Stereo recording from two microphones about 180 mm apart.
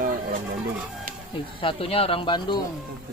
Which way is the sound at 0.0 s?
50° right (ahead or behind).